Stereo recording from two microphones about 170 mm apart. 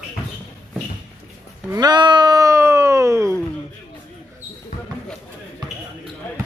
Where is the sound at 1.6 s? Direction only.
25° right (ahead or behind).